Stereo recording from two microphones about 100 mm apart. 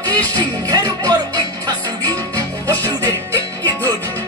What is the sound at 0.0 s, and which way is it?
Music, 40° right (ahead or behind).